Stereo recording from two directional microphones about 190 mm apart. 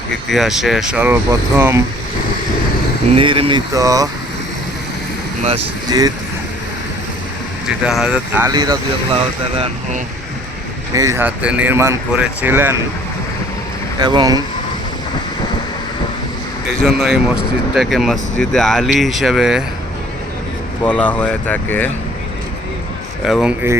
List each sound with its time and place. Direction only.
0.3 s speech: centre (ahead or behind)
3.2 s speech: 30° right (ahead or behind)
3.8 s speech: 15° right (ahead or behind)
5.9 s speech: 20° right (ahead or behind)
7.9 s speech: 5° right (ahead or behind)
8.4 s speech: 20° right (ahead or behind)
10.9 s speech: 15° right (ahead or behind)
14.0 s speech: 20° right (ahead or behind)
16.8 s speech: centre (ahead or behind)
20.8 s speech: 5° left (ahead or behind)
23.2 s speech: 5° right (ahead or behind)